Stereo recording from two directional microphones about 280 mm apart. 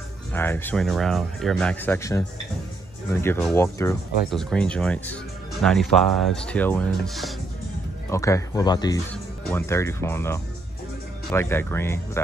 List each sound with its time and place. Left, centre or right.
0.3 s speech: centre